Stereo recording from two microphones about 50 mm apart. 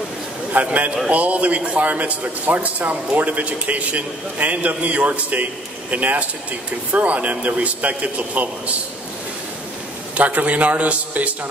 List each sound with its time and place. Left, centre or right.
0.5 s a man's voice: right
10.1 s a man's voice: right